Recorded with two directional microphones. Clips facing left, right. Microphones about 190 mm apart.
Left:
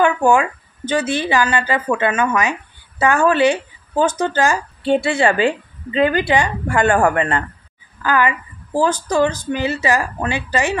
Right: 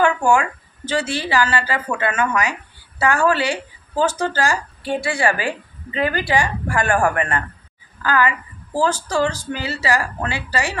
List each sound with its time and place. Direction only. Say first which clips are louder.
0.0 s a woman's voice: left 2 dB; 20° left (ahead or behind)